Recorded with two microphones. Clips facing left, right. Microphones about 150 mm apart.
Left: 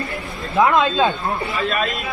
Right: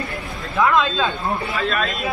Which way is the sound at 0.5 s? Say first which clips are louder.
Left 2 dB; 20° left (ahead or behind).